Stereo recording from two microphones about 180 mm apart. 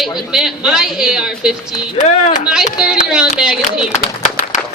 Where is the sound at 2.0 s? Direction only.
45° left (ahead or behind).